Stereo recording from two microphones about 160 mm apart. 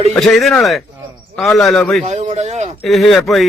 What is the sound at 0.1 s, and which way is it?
A man's voice, 5° left (ahead or behind).